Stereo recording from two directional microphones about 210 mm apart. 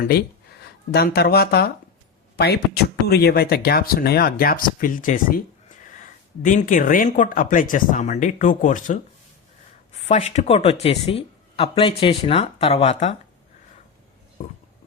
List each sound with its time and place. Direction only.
0.0 s speech: 45° left (ahead or behind)
10.1 s speech: 30° left (ahead or behind)